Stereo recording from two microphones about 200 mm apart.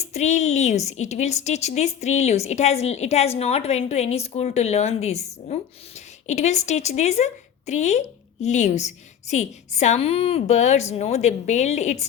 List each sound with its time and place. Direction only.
0.0 s a woman's voice: 35° left (ahead or behind)